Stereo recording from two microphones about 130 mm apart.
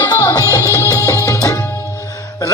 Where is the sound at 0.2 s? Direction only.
20° left (ahead or behind).